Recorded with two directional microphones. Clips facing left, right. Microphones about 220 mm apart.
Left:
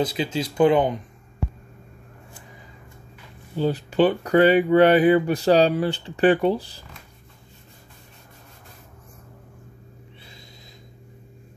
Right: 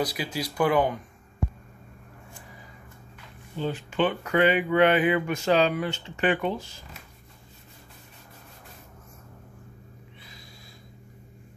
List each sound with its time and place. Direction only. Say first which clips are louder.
0.0 s speech: left 5 dB; 25° left (ahead or behind)
3.5 s speech: left 7 dB; 35° left (ahead or behind)